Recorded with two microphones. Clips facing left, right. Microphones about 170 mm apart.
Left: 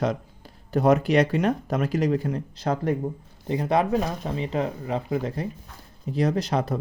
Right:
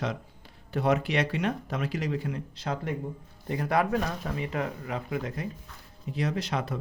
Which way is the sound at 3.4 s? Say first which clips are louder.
Left 4 dB; 20° left (ahead or behind).